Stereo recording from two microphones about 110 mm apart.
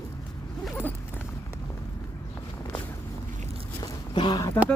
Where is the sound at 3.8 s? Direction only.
40° left (ahead or behind).